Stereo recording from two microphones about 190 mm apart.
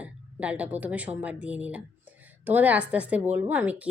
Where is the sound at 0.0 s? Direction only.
5° right (ahead or behind).